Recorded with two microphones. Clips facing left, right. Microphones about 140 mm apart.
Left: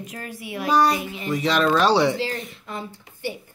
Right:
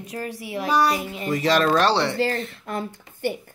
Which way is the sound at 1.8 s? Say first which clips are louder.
Left 2 dB; 10° left (ahead or behind).